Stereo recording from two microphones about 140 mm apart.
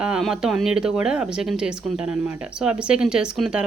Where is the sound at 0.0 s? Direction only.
5° right (ahead or behind).